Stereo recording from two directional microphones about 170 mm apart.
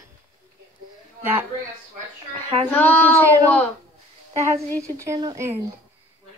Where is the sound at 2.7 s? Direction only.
10° left (ahead or behind).